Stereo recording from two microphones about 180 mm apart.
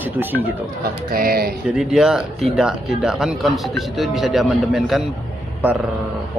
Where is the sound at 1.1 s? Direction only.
55° right (ahead or behind).